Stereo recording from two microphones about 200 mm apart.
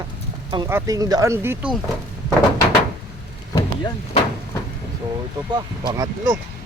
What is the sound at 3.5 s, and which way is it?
Speech, 20° left (ahead or behind).